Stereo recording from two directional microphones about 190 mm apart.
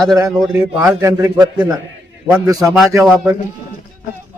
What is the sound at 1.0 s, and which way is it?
Speech, 15° right (ahead or behind).